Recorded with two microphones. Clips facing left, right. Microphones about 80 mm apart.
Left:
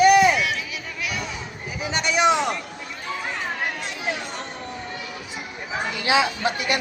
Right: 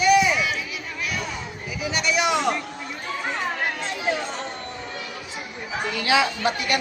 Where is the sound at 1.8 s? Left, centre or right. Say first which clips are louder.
Left 3 dB; left.